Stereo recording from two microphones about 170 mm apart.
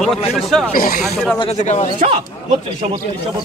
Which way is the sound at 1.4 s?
40° left (ahead or behind).